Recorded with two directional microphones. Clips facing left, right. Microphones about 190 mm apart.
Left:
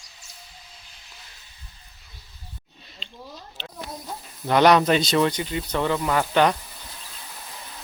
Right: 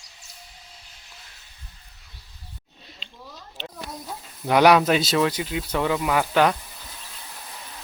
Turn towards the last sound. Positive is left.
turn(degrees=-5)  # may be behind; listen again after turning